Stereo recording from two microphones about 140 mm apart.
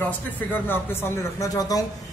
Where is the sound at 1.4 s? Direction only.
25° left (ahead or behind).